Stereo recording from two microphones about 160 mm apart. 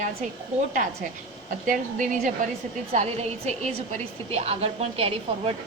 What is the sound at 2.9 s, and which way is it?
A woman's voice, 45° right (ahead or behind).